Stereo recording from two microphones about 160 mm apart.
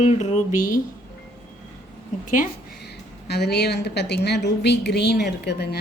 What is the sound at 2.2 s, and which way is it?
Speech, 55° left (ahead or behind).